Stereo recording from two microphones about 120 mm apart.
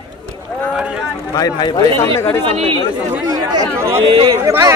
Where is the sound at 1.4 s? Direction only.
35° left (ahead or behind).